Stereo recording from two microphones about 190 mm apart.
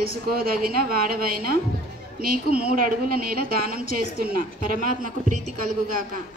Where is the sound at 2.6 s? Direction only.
50° right (ahead or behind).